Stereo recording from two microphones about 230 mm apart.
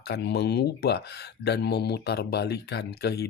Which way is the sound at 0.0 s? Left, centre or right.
Left.